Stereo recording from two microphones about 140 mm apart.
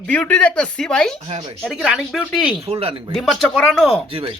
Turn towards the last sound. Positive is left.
turn(degrees=-40)  # may be behind; listen again after turning